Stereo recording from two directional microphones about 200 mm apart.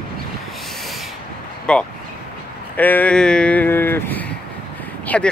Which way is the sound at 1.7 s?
5° left (ahead or behind).